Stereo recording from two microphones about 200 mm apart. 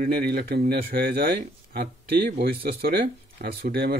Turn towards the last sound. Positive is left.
turn(degrees=-50)  # may be behind; listen again after turning